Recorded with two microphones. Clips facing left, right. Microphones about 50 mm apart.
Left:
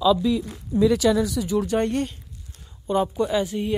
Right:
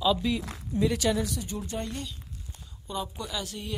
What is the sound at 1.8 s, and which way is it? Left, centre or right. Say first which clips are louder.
Speech: left 12 dB; left.